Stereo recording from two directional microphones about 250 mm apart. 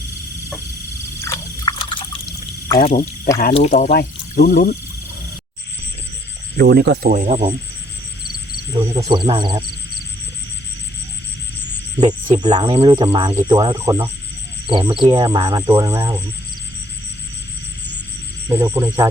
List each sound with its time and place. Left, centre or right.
1.2 s water: centre
2.7 s speech: left
3.8 s speech: left
6.6 s speech: right
8.7 s speech: centre
11.9 s speech: centre
18.4 s speech: centre